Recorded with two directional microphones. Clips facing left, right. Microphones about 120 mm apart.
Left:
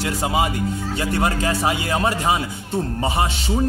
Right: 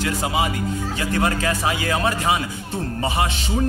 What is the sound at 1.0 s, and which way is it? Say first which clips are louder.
A man's voice: left 1 dB; 30° left (ahead or behind).